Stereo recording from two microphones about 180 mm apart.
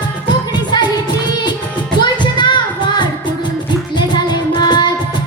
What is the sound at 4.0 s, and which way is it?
Child singing, 25° left (ahead or behind).